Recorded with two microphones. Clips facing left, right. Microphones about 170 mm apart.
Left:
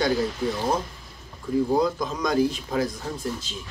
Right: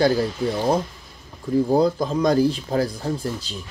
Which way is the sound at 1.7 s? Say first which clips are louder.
Right 4 dB; 30° right (ahead or behind).